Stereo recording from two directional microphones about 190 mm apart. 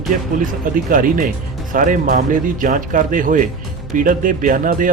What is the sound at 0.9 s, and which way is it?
Speech, 45° right (ahead or behind).